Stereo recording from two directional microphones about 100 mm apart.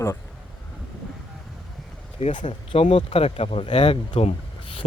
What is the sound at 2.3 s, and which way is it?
Speech, 55° left (ahead or behind).